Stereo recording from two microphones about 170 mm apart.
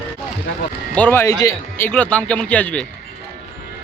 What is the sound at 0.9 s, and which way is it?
Speech, 10° left (ahead or behind).